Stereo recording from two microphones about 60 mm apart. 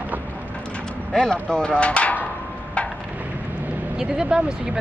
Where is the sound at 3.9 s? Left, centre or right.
Centre.